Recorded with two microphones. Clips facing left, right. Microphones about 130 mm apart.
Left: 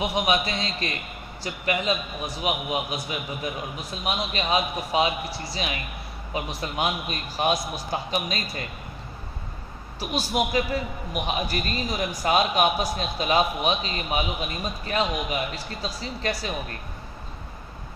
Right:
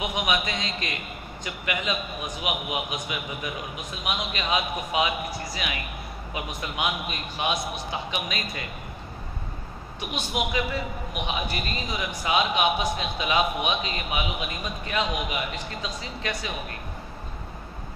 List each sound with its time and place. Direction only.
0.0 s a man's voice: 35° left (ahead or behind)
9.9 s a man's voice: 35° left (ahead or behind)